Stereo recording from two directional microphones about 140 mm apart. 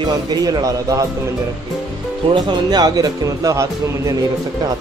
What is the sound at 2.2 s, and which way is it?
Speech, 30° right (ahead or behind).